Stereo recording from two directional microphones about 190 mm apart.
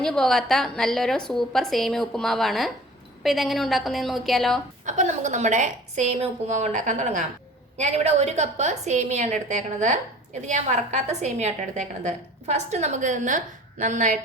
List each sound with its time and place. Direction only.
0.0 s a woman's voice: centre (ahead or behind)
4.9 s a woman's voice: 40° right (ahead or behind)